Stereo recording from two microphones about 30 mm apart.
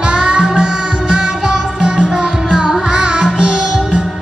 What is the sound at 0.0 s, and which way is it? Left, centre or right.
Music, right.